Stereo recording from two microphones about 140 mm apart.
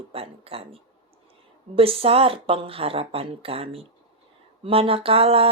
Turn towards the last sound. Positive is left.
turn(degrees=-45)  # may be behind; listen again after turning